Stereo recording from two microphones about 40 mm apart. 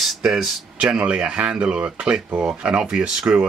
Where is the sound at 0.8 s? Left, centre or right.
Right.